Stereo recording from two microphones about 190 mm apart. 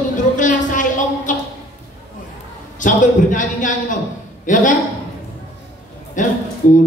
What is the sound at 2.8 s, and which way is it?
A man's voice, 40° left (ahead or behind).